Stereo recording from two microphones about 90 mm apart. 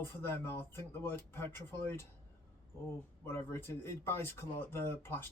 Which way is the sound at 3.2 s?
30° left (ahead or behind).